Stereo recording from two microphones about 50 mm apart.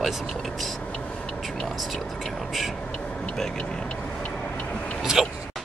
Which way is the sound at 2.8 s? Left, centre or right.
Centre.